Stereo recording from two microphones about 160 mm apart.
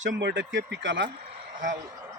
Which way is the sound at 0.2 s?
90° right.